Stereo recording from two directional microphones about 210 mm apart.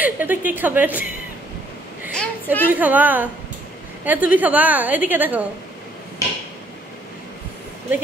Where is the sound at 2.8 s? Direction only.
10° right (ahead or behind).